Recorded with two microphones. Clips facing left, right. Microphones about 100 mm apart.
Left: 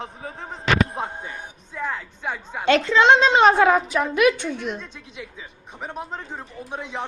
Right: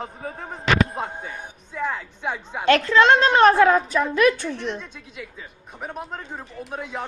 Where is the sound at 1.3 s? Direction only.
15° right (ahead or behind).